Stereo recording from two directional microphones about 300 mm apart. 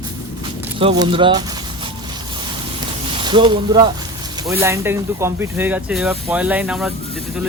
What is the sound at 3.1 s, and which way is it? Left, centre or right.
Speech, centre.